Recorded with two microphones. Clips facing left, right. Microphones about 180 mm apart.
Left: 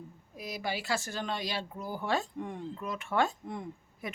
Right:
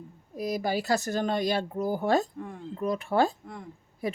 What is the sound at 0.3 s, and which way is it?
Speech, 40° right (ahead or behind).